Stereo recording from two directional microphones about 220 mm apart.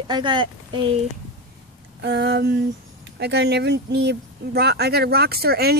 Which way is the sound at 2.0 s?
50° right (ahead or behind).